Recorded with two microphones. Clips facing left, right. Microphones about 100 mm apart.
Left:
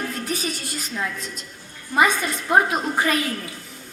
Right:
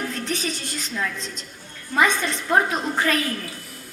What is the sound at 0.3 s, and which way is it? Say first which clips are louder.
Music: even; 10° left (ahead or behind).